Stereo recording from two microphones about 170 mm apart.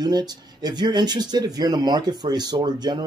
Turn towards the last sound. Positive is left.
turn(degrees=-25)  # may be behind; listen again after turning